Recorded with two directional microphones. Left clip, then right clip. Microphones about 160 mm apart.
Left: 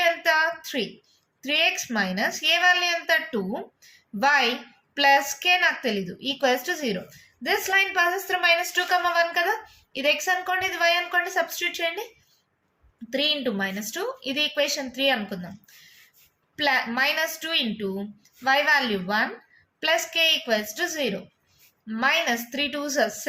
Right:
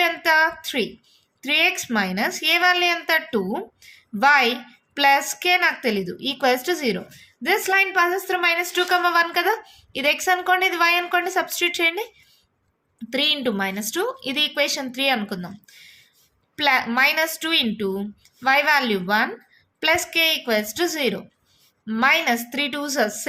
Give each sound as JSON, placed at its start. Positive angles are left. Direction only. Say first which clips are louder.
{"t": 0.0, "sound": "a sound", "louder": "right 3 dB", "side_deg": -50}
{"t": 1.4, "sound": "a woman's voice", "louder": "right 3 dB", "side_deg": -50}
{"t": 13.1, "sound": "a woman's voice", "louder": "right 3 dB", "side_deg": -50}